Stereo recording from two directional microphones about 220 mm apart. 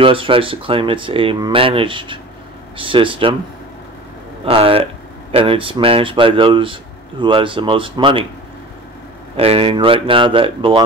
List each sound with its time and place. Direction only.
0.0 s speech: 25° right (ahead or behind)
4.5 s speech: 25° right (ahead or behind)
9.4 s speech: 25° right (ahead or behind)